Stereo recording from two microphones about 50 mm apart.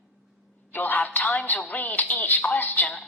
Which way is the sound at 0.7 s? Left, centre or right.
Left.